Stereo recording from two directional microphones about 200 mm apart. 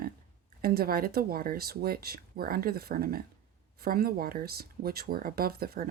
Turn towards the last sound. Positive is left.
turn(degrees=-50)  # may be behind; listen again after turning